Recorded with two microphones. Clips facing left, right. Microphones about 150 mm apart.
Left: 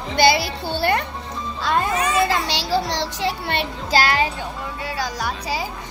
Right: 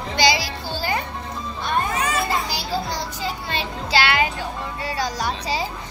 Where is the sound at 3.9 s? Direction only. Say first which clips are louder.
Left 1 dB; 40° left (ahead or behind).